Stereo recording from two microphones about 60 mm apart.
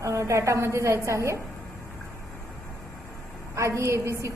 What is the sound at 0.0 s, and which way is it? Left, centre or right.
A woman's voice, right.